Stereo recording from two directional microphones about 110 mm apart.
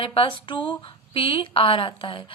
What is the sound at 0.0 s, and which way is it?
A woman's voice, 55° left (ahead or behind).